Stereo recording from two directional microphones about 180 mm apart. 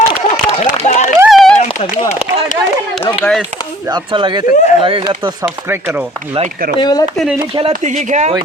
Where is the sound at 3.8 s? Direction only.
25° right (ahead or behind).